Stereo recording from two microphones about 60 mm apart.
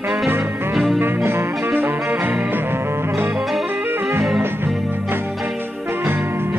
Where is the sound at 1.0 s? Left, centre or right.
Right.